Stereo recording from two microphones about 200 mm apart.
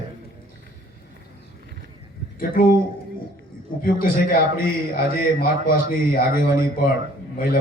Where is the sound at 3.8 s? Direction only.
45° left (ahead or behind).